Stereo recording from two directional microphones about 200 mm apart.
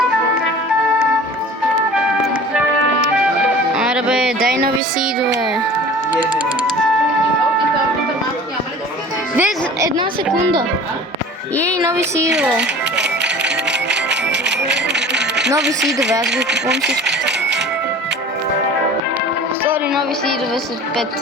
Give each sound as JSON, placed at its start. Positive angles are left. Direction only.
{"t": 3.8, "sound": "music", "side_deg": -5}
{"t": 4.4, "sound": "music", "side_deg": -45}
{"t": 9.3, "sound": "music", "side_deg": -10}
{"t": 11.8, "sound": "a child's voice", "side_deg": -15}
{"t": 13.0, "sound": "music", "side_deg": -60}
{"t": 15.9, "sound": "speech", "side_deg": -60}
{"t": 19.6, "sound": "music", "side_deg": -10}